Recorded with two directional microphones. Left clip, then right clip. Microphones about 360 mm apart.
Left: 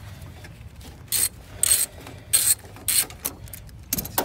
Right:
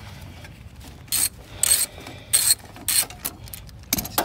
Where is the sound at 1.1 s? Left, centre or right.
Centre.